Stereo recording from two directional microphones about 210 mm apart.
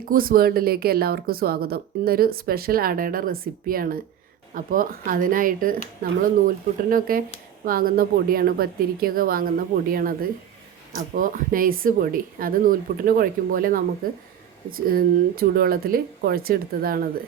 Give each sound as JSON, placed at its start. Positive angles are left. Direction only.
{"t": 0.0, "sound": "speech", "side_deg": -45}
{"t": 6.9, "sound": "speech", "side_deg": -40}
{"t": 14.8, "sound": "speech", "side_deg": -45}